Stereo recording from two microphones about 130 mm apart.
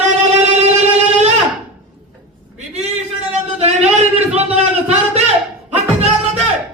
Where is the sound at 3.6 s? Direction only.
55° right (ahead or behind).